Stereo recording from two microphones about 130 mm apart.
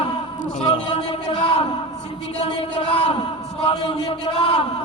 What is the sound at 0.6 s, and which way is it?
Speech, 55° left (ahead or behind).